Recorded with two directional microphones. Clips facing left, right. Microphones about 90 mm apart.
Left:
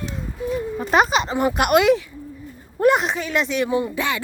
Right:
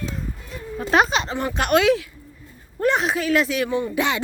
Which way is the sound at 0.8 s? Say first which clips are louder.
Even; 5° left (ahead or behind).